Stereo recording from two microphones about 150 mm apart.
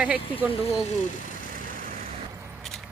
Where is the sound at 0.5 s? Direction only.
40° left (ahead or behind).